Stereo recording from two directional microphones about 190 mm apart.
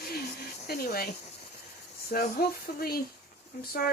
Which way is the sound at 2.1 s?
50° left (ahead or behind).